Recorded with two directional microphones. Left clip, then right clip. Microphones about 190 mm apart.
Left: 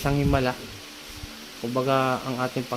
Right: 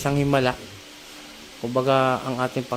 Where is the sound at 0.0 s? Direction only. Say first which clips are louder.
Right 3 dB; 20° right (ahead or behind).